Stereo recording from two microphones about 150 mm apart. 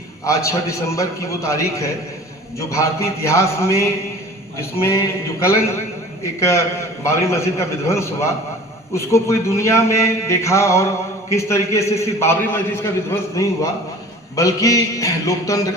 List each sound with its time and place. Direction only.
0.3 s a man's voice: 20° left (ahead or behind)